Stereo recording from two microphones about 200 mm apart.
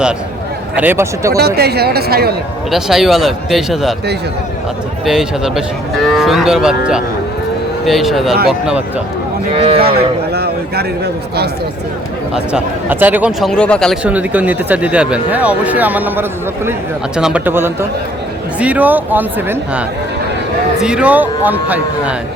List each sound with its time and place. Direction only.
0.8 s speech: 10° right (ahead or behind)
1.4 s a man's voice: 50° right (ahead or behind)
2.6 s cattle: centre (ahead or behind)
5.0 s cattle: centre (ahead or behind)
9.6 s speech: 30° right (ahead or behind)
10.3 s a man's voice: 55° right (ahead or behind)
12.3 s speech: 5° right (ahead or behind)
20.8 s speech: 5° right (ahead or behind)